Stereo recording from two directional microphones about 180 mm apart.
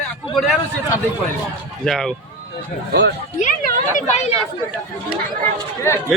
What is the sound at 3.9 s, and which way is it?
Speech, 40° left (ahead or behind).